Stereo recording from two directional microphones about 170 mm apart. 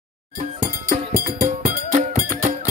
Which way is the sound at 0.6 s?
55° right (ahead or behind).